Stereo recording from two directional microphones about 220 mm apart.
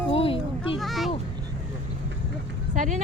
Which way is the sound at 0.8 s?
Centre (ahead or behind).